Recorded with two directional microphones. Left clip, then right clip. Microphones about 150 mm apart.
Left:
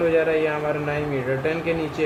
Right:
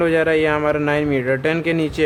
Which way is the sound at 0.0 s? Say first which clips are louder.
Right 3 dB; 50° right (ahead or behind).